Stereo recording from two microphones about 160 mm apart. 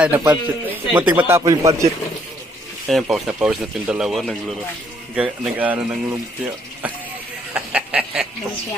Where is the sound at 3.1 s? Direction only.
5° right (ahead or behind).